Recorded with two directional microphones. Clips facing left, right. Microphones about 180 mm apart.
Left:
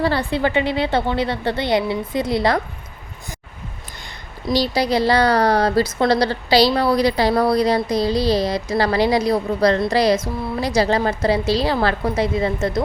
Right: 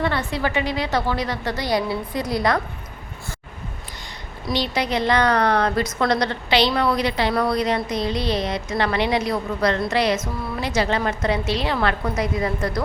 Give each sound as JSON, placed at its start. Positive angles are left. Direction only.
{"t": 0.0, "sound": "a woman's voice", "side_deg": 30}
{"t": 4.5, "sound": "a woman's voice", "side_deg": 35}